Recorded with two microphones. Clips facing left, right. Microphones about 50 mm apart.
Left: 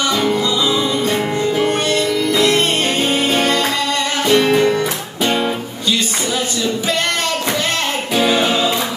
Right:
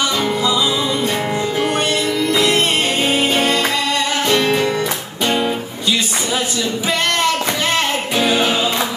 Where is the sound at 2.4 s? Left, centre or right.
Centre.